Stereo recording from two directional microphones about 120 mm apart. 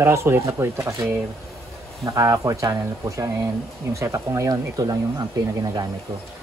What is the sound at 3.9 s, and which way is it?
Speech, 25° right (ahead or behind).